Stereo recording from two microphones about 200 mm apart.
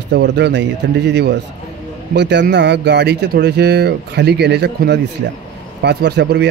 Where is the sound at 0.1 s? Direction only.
60° right (ahead or behind).